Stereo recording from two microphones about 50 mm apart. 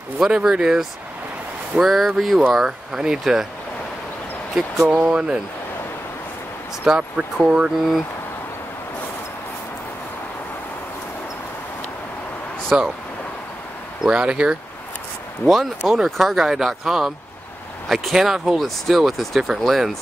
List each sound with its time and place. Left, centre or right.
0.2 s speech: centre
2.5 s speech: centre
4.9 s speech: right
7.0 s speech: right
12.7 s speech: centre
14.0 s speech: centre
15.4 s speech: centre